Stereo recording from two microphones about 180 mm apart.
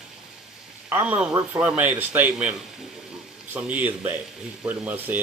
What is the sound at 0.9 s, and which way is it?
A man's voice, 10° right (ahead or behind).